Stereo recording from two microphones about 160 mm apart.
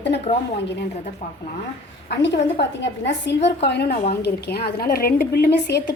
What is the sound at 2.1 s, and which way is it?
A woman's voice, 90° left.